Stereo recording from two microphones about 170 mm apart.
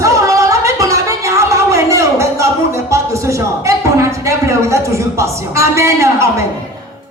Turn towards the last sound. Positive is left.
turn(degrees=-15)  # may be behind; listen again after turning